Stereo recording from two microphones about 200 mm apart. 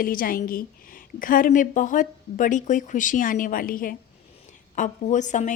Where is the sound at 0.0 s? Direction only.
45° left (ahead or behind).